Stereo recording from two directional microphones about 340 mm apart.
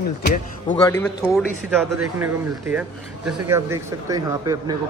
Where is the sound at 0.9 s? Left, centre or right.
Centre.